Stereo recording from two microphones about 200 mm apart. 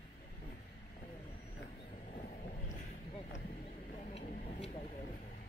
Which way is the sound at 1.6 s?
35° left (ahead or behind).